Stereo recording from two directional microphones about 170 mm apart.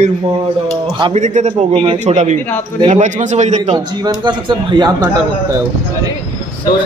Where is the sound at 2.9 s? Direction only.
45° right (ahead or behind).